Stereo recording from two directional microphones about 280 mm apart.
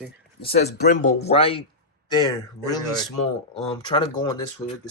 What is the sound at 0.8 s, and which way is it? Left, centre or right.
Speech, left.